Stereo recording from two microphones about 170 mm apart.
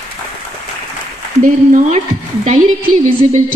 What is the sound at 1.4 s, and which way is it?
A woman's voice, 50° right (ahead or behind).